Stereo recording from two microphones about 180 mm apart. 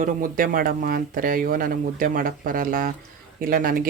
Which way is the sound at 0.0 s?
50° right (ahead or behind).